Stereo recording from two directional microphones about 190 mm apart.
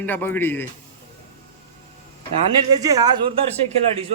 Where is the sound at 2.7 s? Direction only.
20° right (ahead or behind).